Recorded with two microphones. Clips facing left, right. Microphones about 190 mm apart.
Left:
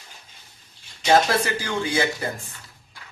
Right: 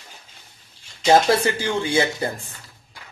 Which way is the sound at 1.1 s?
25° right (ahead or behind).